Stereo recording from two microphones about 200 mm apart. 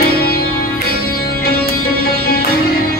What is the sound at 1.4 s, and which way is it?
Music, 50° left (ahead or behind).